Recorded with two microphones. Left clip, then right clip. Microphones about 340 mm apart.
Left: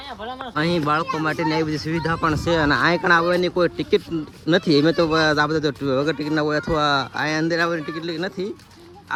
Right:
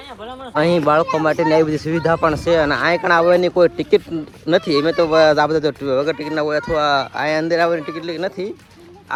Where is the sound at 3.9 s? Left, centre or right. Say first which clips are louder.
Right 4 dB; centre.